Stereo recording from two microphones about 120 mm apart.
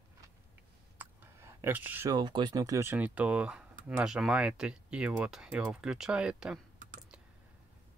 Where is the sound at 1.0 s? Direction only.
20° right (ahead or behind).